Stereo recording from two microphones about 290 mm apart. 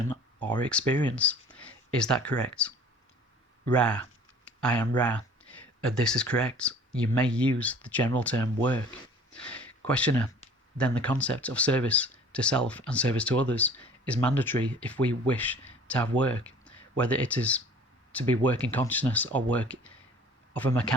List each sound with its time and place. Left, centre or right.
0.6 s a man's voice: centre